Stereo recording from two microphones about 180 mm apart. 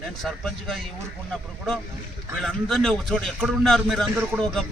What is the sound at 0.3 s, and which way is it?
Speech, centre (ahead or behind).